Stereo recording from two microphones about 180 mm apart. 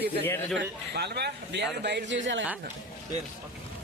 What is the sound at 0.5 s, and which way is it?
A man's voice, 70° right (ahead or behind).